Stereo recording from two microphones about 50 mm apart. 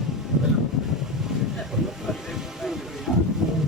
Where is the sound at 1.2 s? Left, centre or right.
Centre.